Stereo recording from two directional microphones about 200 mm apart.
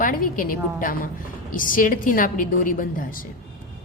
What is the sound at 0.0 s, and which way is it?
A woman's voice, 45° left (ahead or behind).